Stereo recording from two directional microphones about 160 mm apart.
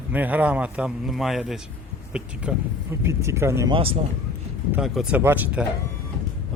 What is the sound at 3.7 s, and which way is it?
Speech, 35° right (ahead or behind).